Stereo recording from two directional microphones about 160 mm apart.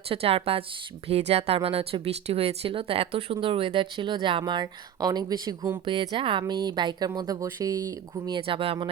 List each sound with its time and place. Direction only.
0.1 s speech: 35° right (ahead or behind)